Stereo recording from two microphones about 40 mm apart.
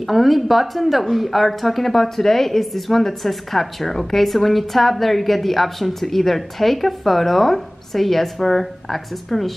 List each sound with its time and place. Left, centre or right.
0.0 s speech: centre